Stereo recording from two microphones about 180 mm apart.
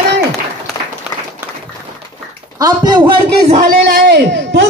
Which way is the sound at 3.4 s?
45° right (ahead or behind).